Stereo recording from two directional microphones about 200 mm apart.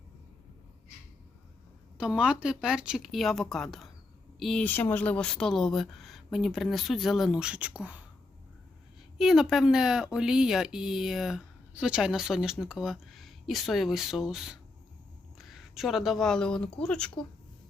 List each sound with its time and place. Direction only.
2.0 s speech: 5° right (ahead or behind)
9.1 s speech: centre (ahead or behind)